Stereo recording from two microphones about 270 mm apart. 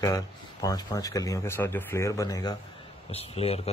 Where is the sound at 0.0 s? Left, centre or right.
Centre.